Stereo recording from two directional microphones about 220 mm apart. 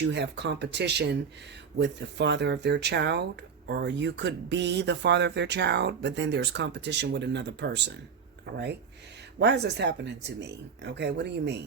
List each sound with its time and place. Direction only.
0.0 s speech: 50° right (ahead or behind)